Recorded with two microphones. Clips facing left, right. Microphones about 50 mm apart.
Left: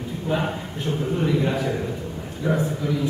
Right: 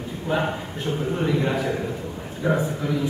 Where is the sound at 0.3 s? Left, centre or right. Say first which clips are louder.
Right 1 dB; centre.